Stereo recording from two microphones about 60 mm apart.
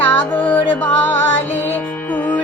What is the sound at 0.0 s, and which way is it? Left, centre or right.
Music, left.